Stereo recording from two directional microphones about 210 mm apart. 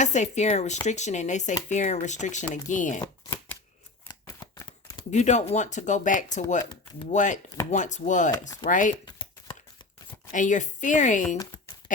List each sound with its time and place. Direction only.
0.0 s speech: 35° left (ahead or behind)
3.0 s shuffling cards: 10° left (ahead or behind)
4.1 s a sound: 15° left (ahead or behind)
5.1 s speech: 35° left (ahead or behind)
9.0 s a sound: 25° left (ahead or behind)
10.3 s speech: 35° left (ahead or behind)